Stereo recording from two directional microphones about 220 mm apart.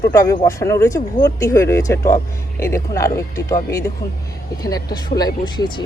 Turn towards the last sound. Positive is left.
turn(degrees=20)  # may be behind; listen again after turning